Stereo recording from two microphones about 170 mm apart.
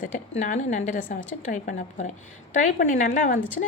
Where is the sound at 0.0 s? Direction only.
45° left (ahead or behind).